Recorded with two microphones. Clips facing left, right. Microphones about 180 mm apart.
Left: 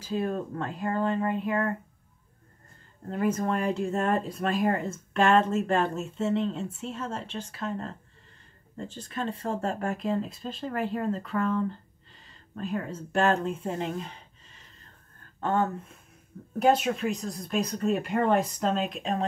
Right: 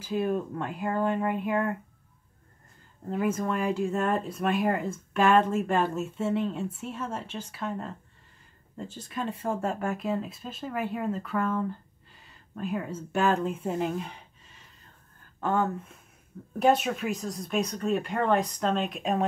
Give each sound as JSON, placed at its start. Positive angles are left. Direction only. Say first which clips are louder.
{"t": 0.1, "sound": "speech", "louder": "right 1 dB", "side_deg": -10}
{"t": 3.1, "sound": "speech", "louder": "left 1 dB", "side_deg": -5}
{"t": 16.6, "sound": "speech", "louder": "even", "side_deg": 0}